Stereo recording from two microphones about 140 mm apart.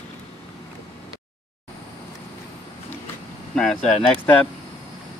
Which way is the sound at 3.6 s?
5° left (ahead or behind).